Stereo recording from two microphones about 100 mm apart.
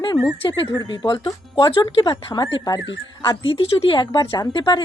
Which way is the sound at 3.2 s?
55° left (ahead or behind).